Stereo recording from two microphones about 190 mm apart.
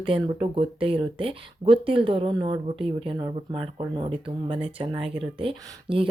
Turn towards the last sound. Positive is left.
turn(degrees=-30)  # may be behind; listen again after turning